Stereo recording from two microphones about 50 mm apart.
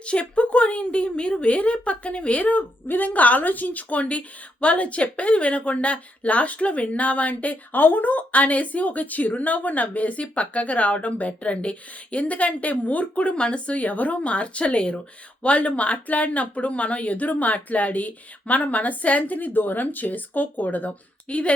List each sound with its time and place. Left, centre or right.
0.0 s speech: left